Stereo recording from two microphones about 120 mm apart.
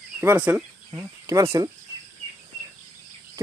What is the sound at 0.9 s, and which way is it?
Speech, 25° right (ahead or behind).